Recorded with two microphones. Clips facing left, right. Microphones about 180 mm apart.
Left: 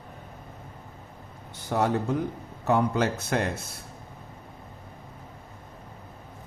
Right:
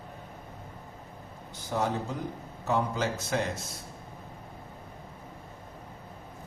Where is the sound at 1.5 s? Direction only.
60° left (ahead or behind).